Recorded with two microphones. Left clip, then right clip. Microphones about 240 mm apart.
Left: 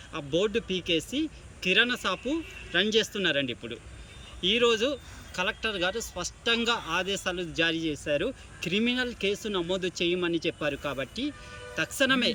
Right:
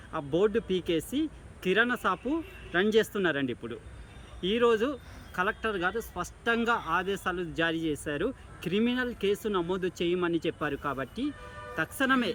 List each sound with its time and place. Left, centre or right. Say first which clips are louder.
0.1 s speech: right 1 dB; centre